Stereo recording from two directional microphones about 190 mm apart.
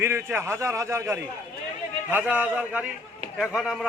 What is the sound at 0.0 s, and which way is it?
A man's voice, 15° right (ahead or behind).